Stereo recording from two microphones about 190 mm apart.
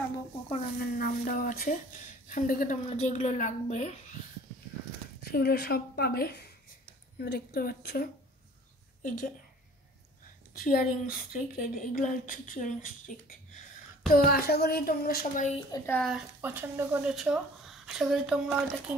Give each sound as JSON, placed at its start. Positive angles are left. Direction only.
{"t": 0.7, "sound": "a sound", "side_deg": 50}
{"t": 2.2, "sound": "a woman's voice", "side_deg": 45}
{"t": 5.2, "sound": "a woman's voice", "side_deg": 55}
{"t": 10.6, "sound": "a woman's voice", "side_deg": 50}
{"t": 15.7, "sound": "speech", "side_deg": 15}
{"t": 16.0, "sound": "a woman's voice", "side_deg": 0}
{"t": 16.3, "sound": "a woman's voice", "side_deg": -10}